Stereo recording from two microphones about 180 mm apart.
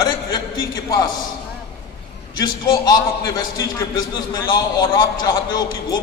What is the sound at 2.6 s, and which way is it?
A man's voice, 25° left (ahead or behind).